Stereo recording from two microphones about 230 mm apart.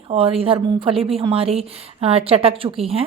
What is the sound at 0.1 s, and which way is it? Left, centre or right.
A woman's voice, right.